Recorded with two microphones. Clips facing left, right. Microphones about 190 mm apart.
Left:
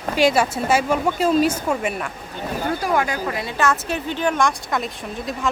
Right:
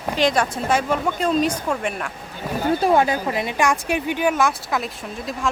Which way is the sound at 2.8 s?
25° right (ahead or behind).